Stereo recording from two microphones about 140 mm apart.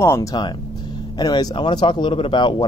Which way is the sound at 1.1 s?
30° left (ahead or behind).